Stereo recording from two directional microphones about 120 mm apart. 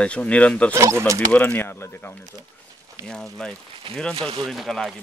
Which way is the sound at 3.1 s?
5° left (ahead or behind).